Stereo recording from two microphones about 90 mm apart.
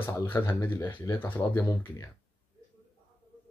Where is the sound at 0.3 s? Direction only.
25° left (ahead or behind).